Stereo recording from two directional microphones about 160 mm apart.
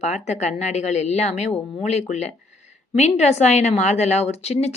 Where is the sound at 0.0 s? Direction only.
45° left (ahead or behind).